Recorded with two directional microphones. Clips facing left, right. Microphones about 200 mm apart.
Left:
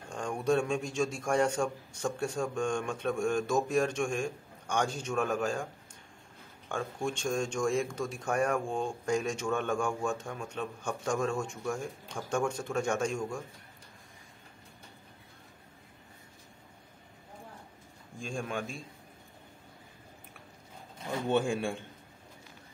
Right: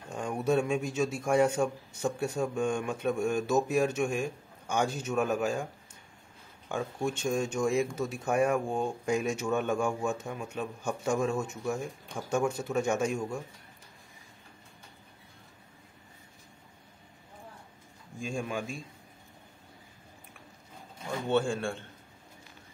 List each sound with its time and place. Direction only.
0.1 s speech: 5° right (ahead or behind)
6.7 s speech: 5° right (ahead or behind)
18.2 s speech: centre (ahead or behind)
21.3 s a man's voice: 15° left (ahead or behind)